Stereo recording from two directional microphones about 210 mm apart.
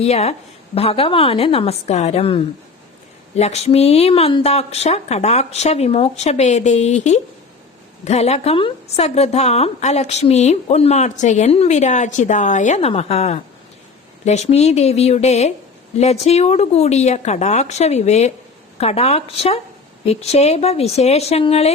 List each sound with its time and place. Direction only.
0.0 s a woman's voice: 30° left (ahead or behind)